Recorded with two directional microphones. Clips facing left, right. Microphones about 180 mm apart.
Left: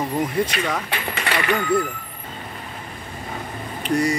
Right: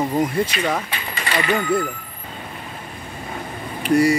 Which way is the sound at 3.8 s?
5° right (ahead or behind).